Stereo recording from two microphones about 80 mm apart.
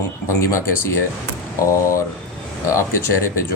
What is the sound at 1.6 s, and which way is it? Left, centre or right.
Speech, left.